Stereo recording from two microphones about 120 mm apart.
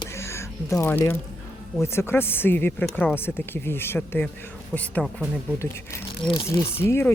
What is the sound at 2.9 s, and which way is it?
Speech, 5° left (ahead or behind).